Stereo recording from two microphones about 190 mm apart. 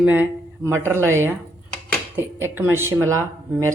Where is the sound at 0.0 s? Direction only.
10° right (ahead or behind).